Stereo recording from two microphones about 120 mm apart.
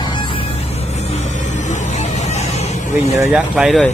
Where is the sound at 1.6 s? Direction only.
70° left (ahead or behind).